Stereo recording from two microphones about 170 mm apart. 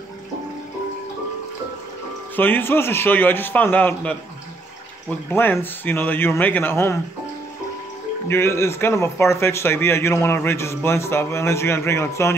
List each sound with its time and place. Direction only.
2.3 s speech: 10° left (ahead or behind)
5.3 s speech: 10° left (ahead or behind)
8.3 s speech: 15° left (ahead or behind)